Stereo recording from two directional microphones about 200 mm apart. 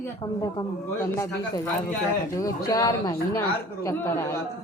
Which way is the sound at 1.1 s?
15° left (ahead or behind).